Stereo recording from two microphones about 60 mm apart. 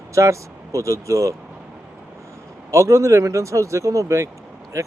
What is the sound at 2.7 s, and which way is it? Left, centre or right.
Speech, right.